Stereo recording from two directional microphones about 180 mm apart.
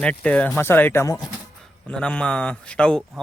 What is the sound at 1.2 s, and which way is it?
Speech, 5° left (ahead or behind).